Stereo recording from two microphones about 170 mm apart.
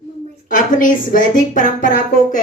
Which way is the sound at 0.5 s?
50° left (ahead or behind).